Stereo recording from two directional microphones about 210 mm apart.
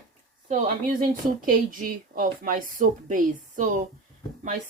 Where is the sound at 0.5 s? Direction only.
40° right (ahead or behind).